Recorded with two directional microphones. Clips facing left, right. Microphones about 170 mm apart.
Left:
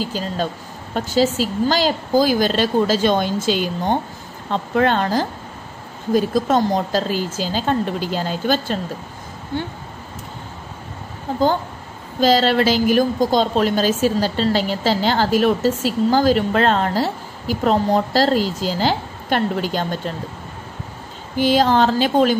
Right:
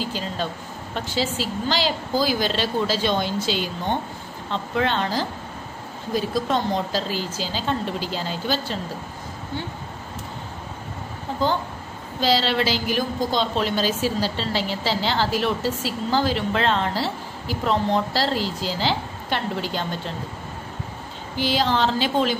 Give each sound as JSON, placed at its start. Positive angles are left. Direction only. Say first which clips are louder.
{"t": 0.0, "sound": "a woman's voice", "louder": "left 4 dB", "side_deg": 40}
{"t": 12.2, "sound": "a woman's voice", "louder": "left 6 dB", "side_deg": 45}
{"t": 21.4, "sound": "a woman's voice", "louder": "left 6 dB", "side_deg": 45}